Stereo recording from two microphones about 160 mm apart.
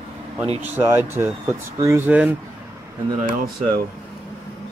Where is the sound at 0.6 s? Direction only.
15° right (ahead or behind).